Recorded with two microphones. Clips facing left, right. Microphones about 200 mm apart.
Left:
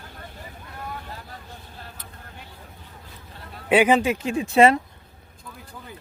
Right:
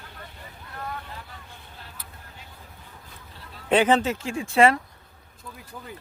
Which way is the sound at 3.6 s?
10° left (ahead or behind).